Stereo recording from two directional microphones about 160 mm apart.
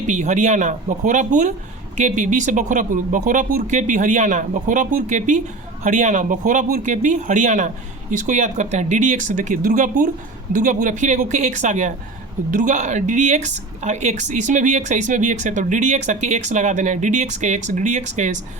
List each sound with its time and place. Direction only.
0.1 s speech: 50° right (ahead or behind)